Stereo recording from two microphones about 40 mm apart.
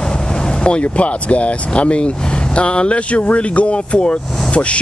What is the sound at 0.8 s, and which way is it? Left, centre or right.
Speech, left.